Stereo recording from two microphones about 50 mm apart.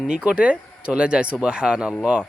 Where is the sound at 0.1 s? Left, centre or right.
Right.